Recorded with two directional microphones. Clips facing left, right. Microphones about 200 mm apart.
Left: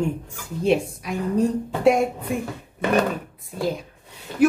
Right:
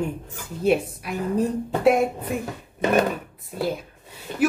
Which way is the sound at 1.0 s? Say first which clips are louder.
Left 2 dB; 5° right (ahead or behind).